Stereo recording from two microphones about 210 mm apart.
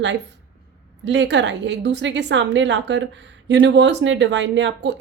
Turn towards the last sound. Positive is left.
turn(degrees=-60)  # may be behind; listen again after turning